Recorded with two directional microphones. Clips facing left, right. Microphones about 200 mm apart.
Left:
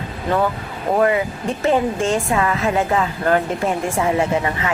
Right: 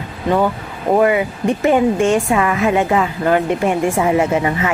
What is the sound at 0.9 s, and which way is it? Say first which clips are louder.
A woman's voice: right 3 dB; 20° right (ahead or behind).